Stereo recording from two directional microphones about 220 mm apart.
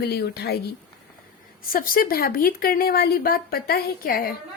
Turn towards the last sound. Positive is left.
turn(degrees=40)  # may be behind; listen again after turning